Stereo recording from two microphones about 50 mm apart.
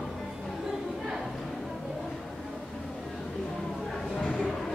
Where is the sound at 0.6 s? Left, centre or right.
Centre.